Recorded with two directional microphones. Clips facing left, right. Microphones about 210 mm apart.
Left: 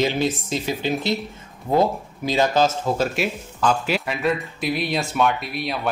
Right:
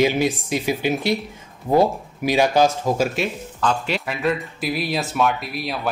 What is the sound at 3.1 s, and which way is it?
Speech, 5° left (ahead or behind).